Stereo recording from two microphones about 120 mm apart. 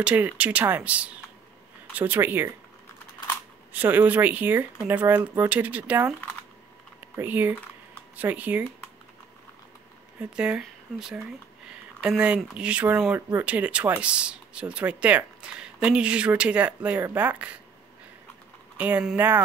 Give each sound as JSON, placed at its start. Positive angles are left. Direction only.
{"t": 0.0, "sound": "speech", "side_deg": -10}
{"t": 3.7, "sound": "speech", "side_deg": -15}
{"t": 7.2, "sound": "speech", "side_deg": -15}
{"t": 10.3, "sound": "speech", "side_deg": -10}
{"t": 18.8, "sound": "speech", "side_deg": -15}